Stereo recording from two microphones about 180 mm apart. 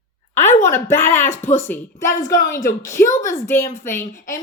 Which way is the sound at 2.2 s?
50° left (ahead or behind).